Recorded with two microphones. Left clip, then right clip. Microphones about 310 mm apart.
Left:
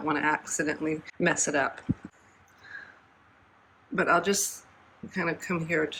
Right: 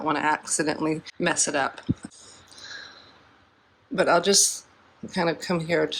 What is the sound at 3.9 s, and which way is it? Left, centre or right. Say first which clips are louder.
Speech: right 5 dB; centre.